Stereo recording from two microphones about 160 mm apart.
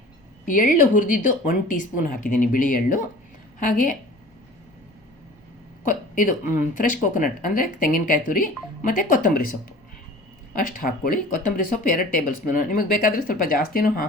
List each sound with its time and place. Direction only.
0.4 s speech: 55° left (ahead or behind)
5.8 s a woman's voice: 55° left (ahead or behind)
10.5 s speech: 60° left (ahead or behind)